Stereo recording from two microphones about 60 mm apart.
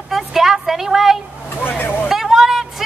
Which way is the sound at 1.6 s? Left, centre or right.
Left.